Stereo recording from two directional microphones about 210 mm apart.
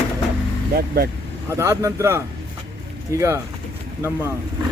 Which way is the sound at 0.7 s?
45° right (ahead or behind).